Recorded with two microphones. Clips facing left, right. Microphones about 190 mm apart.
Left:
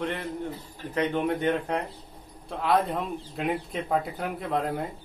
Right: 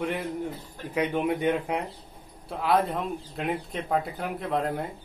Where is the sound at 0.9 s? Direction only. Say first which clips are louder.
Even; 10° right (ahead or behind).